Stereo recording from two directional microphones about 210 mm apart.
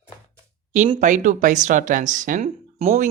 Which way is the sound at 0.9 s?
35° right (ahead or behind).